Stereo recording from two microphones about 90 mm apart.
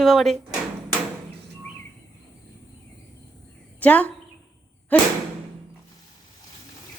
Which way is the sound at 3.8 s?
15° left (ahead or behind).